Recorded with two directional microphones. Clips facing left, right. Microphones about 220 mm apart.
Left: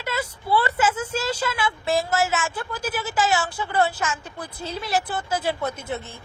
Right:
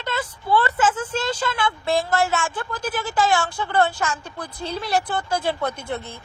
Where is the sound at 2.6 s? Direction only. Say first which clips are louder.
Right 1 dB; 10° left (ahead or behind).